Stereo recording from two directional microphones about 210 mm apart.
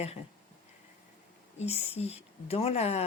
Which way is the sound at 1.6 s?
30° left (ahead or behind).